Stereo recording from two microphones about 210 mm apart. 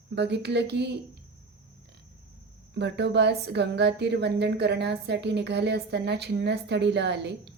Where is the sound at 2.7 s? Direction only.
55° right (ahead or behind).